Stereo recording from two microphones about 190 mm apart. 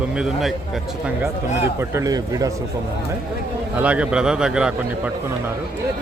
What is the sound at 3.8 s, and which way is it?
Speech, 5° right (ahead or behind).